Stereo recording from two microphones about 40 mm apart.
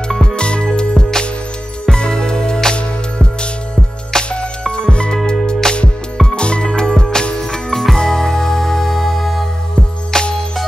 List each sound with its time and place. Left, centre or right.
0.4 s music: left
7.7 s music: centre
10.1 s music: centre